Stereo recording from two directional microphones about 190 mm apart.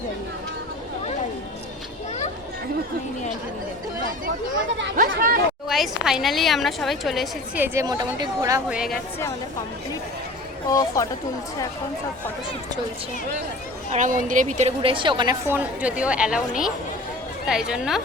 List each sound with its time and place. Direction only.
4.9 s speech: 45° right (ahead or behind)
5.6 s a woman's voice: centre (ahead or behind)
8.7 s a woman's voice: 5° right (ahead or behind)
10.7 s speech: 20° left (ahead or behind)
13.9 s a woman's voice: 40° right (ahead or behind); by 15.4 s 25° right (ahead or behind)
15.4 s a woman's voice: 10° right (ahead or behind)